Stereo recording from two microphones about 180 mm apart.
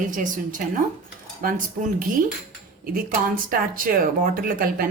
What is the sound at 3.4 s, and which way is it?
A woman's voice, 50° right (ahead or behind).